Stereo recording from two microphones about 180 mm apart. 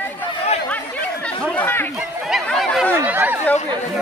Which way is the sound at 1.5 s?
10° left (ahead or behind).